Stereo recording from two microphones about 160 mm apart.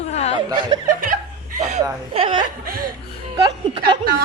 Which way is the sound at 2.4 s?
65° right (ahead or behind).